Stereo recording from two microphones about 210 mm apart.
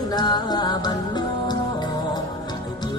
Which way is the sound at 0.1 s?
20° left (ahead or behind).